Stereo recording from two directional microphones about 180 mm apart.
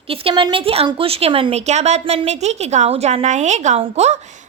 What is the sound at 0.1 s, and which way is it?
Speech, 30° right (ahead or behind).